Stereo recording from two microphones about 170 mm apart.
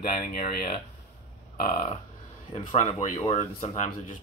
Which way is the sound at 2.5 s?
40° left (ahead or behind).